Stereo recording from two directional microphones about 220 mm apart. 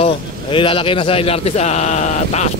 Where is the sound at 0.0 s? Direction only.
25° left (ahead or behind).